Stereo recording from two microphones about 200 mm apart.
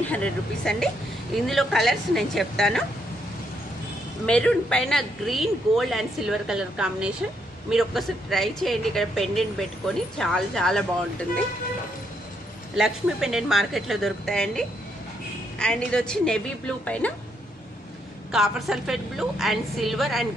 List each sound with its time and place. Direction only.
0.1 s speech: 5° left (ahead or behind)
4.3 s speech: 5° left (ahead or behind)
12.7 s speech: centre (ahead or behind)
18.3 s speech: centre (ahead or behind)